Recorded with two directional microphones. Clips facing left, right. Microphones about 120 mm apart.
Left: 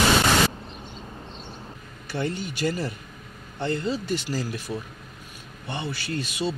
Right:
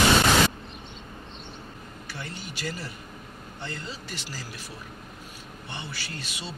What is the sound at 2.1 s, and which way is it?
Speech, 50° left (ahead or behind).